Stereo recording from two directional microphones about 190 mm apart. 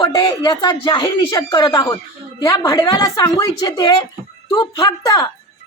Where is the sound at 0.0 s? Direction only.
20° left (ahead or behind).